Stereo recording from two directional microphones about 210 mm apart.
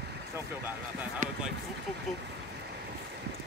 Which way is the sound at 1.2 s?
35° right (ahead or behind).